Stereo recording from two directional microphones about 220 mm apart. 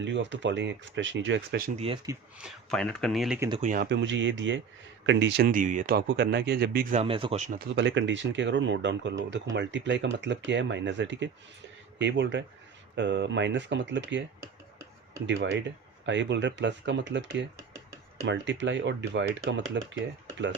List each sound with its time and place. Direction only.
0.0 s speech: 55° right (ahead or behind)
1.8 s speech: 25° right (ahead or behind)
2.4 s speech: centre (ahead or behind)
3.6 s speech: 35° right (ahead or behind)
3.8 s speech: 55° right (ahead or behind)
5.5 s speech: 35° right (ahead or behind)
6.9 s speech: 25° right (ahead or behind)
7.8 s speech: 55° right (ahead or behind)
15.3 s speech: 55° right (ahead or behind)